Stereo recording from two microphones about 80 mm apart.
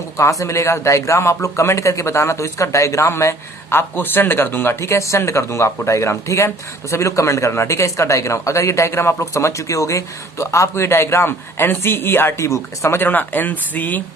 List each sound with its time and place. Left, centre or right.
0.2 s speech: left